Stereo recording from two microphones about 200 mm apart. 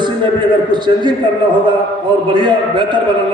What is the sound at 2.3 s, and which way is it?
Speech, 20° right (ahead or behind).